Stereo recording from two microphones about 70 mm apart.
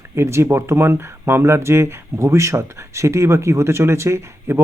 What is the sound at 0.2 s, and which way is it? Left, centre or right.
Speech, right.